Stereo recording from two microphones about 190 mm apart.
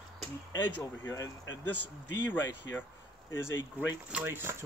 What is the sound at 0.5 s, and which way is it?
Speech, 15° left (ahead or behind).